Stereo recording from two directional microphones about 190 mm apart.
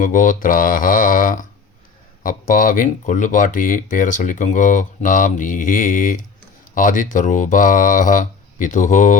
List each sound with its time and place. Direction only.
0.0 s speech: 45° left (ahead or behind)